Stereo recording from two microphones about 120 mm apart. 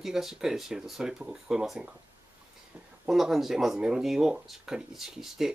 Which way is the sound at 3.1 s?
5° right (ahead or behind).